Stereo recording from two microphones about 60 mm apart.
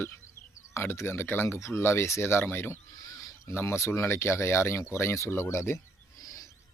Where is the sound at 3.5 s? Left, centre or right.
Left.